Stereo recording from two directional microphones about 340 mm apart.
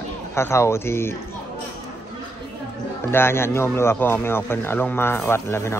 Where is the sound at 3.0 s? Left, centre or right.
Centre.